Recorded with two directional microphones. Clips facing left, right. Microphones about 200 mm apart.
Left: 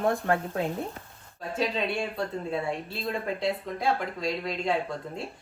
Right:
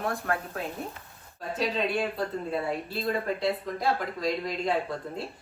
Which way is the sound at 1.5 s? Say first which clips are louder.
Even; centre (ahead or behind).